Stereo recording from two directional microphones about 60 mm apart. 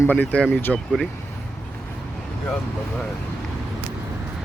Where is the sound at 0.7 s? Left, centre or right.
Centre.